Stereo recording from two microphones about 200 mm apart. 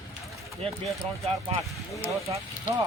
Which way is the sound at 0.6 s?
30° right (ahead or behind).